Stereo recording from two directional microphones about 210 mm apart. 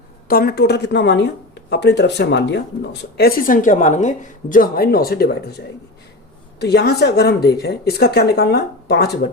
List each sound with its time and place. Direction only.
0.3 s speech: 45° left (ahead or behind)